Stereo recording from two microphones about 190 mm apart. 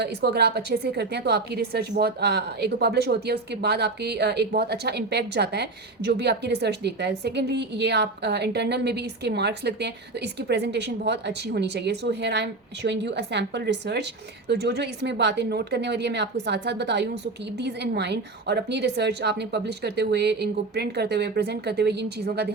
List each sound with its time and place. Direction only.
0.0 s speech: 60° right (ahead or behind)